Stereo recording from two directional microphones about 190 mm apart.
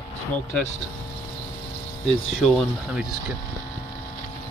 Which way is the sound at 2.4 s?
Centre (ahead or behind).